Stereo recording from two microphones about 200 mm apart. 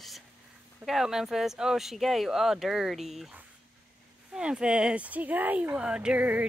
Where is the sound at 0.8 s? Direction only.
Centre (ahead or behind).